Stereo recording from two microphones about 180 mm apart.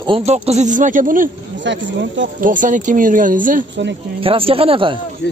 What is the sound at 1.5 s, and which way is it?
Speech, 90° right.